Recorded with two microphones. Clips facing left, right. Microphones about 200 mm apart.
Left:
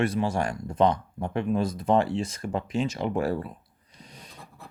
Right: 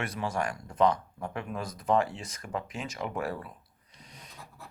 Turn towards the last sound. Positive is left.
turn(degrees=30)  # may be behind; listen again after turning